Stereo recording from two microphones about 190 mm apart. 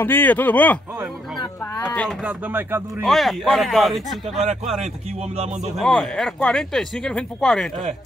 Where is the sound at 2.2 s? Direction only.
5° right (ahead or behind).